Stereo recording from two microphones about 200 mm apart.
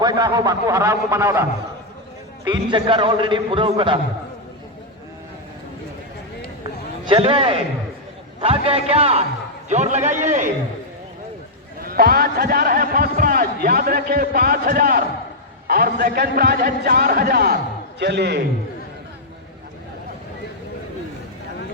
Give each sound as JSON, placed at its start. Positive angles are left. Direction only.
{"t": 0.0, "sound": "a man's voice", "side_deg": -20}
{"t": 2.5, "sound": "a man's voice", "side_deg": -25}
{"t": 7.0, "sound": "a man's voice", "side_deg": -25}
{"t": 11.8, "sound": "a man's voice", "side_deg": -50}